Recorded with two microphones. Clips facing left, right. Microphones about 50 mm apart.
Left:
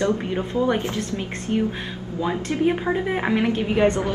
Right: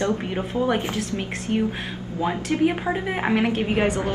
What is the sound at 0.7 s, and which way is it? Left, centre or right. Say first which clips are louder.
Speech: left 1 dB; right.